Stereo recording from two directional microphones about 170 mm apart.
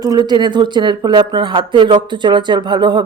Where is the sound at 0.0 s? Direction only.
25° right (ahead or behind).